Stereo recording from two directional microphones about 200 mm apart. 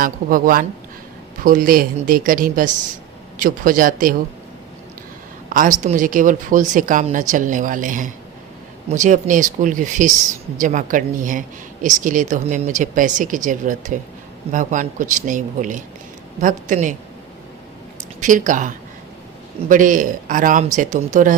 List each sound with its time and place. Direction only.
0.0 s speech: 45° right (ahead or behind)
5.5 s speech: 40° right (ahead or behind)
18.2 s speech: 40° right (ahead or behind)